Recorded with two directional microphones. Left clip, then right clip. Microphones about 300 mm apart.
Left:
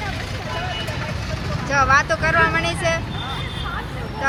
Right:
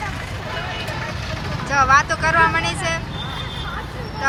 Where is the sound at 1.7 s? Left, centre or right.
Centre.